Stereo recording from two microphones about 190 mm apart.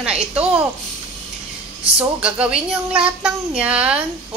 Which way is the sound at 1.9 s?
5° right (ahead or behind).